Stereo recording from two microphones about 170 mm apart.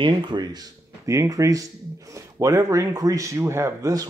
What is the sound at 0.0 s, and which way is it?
Speech, 25° right (ahead or behind).